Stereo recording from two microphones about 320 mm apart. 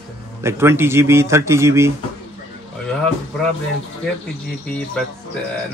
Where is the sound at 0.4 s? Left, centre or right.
Centre.